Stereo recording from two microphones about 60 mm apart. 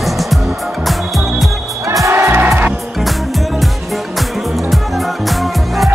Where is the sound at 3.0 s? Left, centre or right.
Centre.